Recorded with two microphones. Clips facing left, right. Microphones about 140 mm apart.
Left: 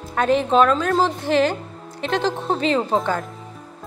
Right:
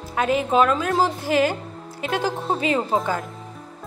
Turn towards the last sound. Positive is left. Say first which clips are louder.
# left 2 dB
turn(degrees=-10)  # may be behind; listen again after turning